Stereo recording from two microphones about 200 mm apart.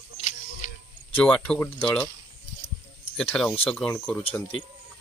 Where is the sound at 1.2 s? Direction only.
5° left (ahead or behind).